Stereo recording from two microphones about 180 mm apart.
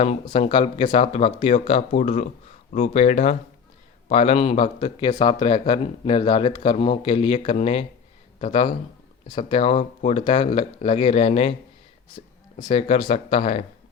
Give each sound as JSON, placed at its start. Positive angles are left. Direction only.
{"t": 0.0, "sound": "speech", "side_deg": 35}
{"t": 12.6, "sound": "speech", "side_deg": 30}